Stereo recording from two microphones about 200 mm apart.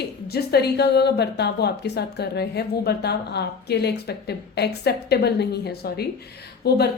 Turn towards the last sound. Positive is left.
turn(degrees=55)  # may be behind; listen again after turning